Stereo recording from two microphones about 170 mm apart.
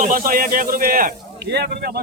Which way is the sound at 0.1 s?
55° right (ahead or behind).